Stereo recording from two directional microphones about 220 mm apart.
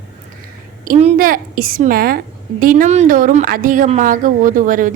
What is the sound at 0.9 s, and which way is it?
A woman's voice, 35° right (ahead or behind).